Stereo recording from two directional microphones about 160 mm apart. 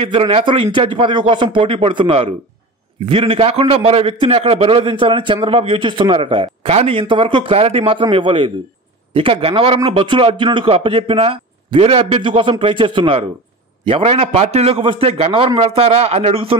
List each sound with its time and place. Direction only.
0.0 s a man's voice: 35° right (ahead or behind)